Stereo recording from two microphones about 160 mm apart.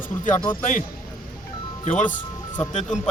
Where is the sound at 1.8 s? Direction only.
50° left (ahead or behind).